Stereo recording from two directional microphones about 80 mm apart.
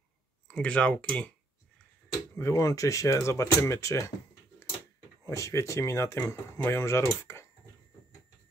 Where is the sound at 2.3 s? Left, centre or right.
Left.